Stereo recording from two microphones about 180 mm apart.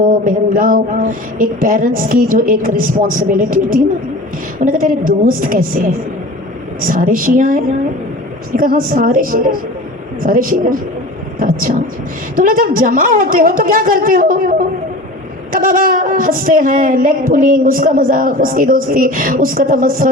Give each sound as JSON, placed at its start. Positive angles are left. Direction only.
{"t": 0.0, "sound": "speech", "side_deg": -50}
{"t": 15.5, "sound": "speech", "side_deg": -50}